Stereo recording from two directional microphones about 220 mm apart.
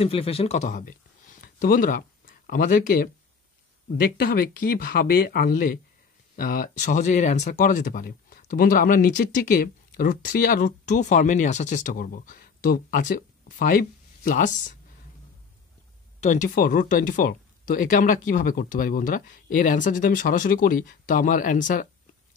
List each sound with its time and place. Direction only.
0.0 s speech: 25° left (ahead or behind)
4.2 s speech: 45° left (ahead or behind)
16.2 s speech: 35° left (ahead or behind)